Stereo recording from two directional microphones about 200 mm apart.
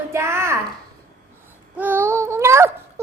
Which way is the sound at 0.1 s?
15° right (ahead or behind).